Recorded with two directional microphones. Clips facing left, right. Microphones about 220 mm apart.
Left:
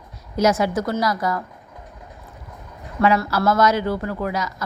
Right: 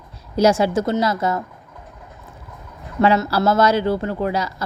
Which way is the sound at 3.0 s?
30° right (ahead or behind).